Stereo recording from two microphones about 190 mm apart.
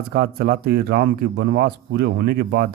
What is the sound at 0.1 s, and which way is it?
A man's voice, 55° right (ahead or behind).